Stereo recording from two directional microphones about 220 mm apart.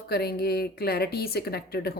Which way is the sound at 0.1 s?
45° left (ahead or behind).